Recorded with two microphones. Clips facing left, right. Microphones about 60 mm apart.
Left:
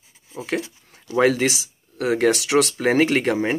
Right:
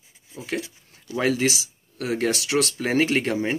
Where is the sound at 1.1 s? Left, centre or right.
Left.